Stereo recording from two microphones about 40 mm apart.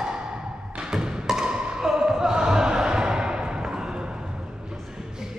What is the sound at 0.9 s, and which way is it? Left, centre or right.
Music, centre.